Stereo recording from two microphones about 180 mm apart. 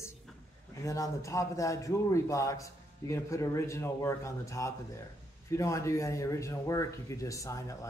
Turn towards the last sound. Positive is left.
turn(degrees=20)  # may be behind; listen again after turning